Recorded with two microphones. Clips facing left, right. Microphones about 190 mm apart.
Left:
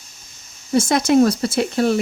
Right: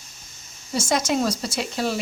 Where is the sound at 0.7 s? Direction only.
60° left (ahead or behind).